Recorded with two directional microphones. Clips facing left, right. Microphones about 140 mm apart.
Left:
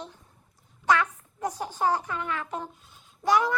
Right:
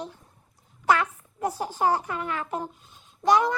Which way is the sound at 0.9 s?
35° right (ahead or behind).